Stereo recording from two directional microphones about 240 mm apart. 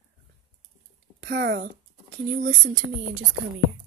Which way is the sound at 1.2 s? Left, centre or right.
Right.